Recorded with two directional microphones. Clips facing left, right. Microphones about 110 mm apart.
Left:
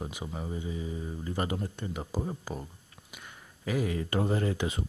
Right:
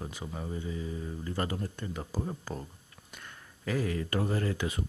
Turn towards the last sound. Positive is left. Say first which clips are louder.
# left 2 dB
turn(degrees=20)  # may be behind; listen again after turning